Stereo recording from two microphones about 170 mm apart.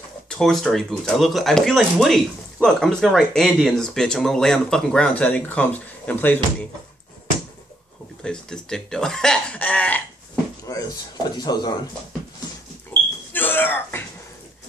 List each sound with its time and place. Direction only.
0.3 s speech: 5° left (ahead or behind)
8.2 s speech: 5° left (ahead or behind)
10.7 s speech: 20° left (ahead or behind)
13.3 s smoke detector: 10° left (ahead or behind)